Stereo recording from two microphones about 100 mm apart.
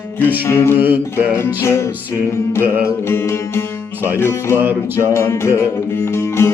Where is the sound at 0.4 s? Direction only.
25° left (ahead or behind).